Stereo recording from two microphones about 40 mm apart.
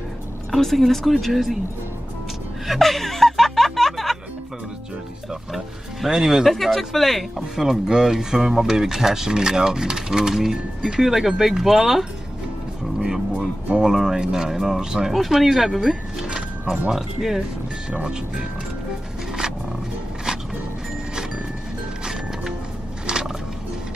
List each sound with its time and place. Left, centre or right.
0.5 s speech: centre
2.6 s music: centre
6.0 s speech: centre
6.4 s speech: centre
7.5 s speech: centre
13.7 s speech: right; by 16.0 s centre
16.2 s music: centre
16.9 s speech: centre
18.0 s speech: right
23.0 s music: centre